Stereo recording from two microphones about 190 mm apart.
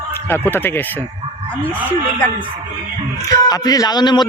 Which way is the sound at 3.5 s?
20° left (ahead or behind).